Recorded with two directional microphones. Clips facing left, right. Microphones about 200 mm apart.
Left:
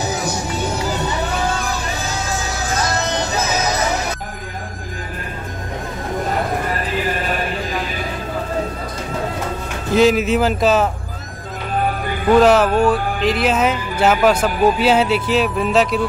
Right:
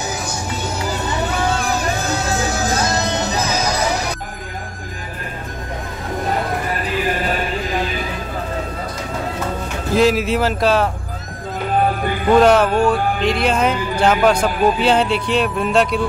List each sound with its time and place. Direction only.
3.2 s music: 15° right (ahead or behind)
9.9 s speech: centre (ahead or behind)
12.4 s speech: centre (ahead or behind)